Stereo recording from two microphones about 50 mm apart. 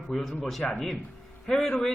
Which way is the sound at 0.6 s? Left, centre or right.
Centre.